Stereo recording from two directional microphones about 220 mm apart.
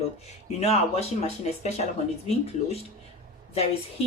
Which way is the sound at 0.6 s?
30° left (ahead or behind).